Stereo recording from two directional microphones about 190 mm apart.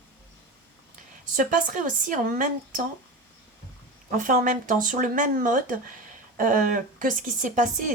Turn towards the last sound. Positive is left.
turn(degrees=-45)  # may be behind; listen again after turning